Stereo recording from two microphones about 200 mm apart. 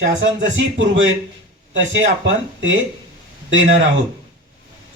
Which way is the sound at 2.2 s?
70° right (ahead or behind).